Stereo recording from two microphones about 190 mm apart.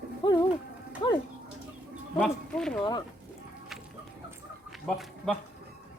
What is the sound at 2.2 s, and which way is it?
Speech, 5° left (ahead or behind).